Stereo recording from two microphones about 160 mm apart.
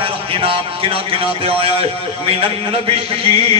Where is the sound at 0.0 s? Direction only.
35° right (ahead or behind).